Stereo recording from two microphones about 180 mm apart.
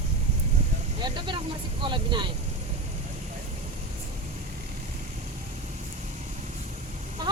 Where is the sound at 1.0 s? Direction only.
25° right (ahead or behind).